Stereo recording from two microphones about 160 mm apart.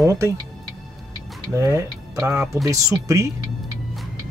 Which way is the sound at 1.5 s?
20° right (ahead or behind).